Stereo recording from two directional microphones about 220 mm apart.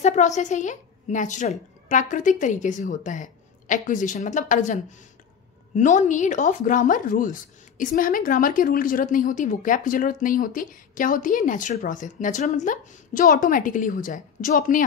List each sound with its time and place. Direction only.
0.0 s speech: 30° left (ahead or behind)
5.8 s speech: 35° left (ahead or behind)